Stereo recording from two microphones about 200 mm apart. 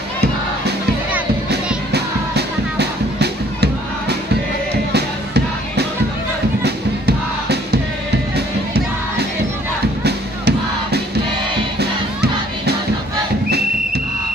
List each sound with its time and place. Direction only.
1.9 s music: 55° right (ahead or behind)
10.0 s music: 55° right (ahead or behind)